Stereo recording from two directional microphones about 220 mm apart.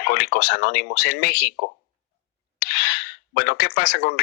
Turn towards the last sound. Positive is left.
turn(degrees=45)  # may be behind; listen again after turning